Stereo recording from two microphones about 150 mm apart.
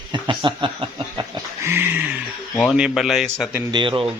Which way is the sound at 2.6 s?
Centre (ahead or behind).